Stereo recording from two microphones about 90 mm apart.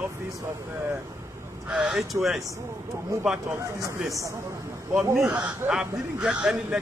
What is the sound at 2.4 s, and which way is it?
Speech, 40° right (ahead or behind).